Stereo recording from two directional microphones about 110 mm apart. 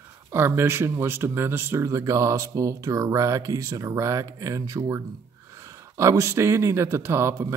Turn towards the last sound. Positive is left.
turn(degrees=-25)  # may be behind; listen again after turning